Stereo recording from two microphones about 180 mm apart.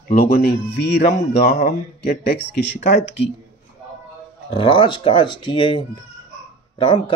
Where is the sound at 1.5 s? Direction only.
40° left (ahead or behind).